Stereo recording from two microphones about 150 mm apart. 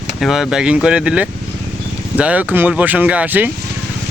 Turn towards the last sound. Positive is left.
turn(degrees=-10)  # may be behind; listen again after turning